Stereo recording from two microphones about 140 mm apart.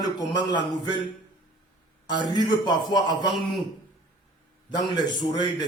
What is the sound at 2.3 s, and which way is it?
Speech, 30° left (ahead or behind).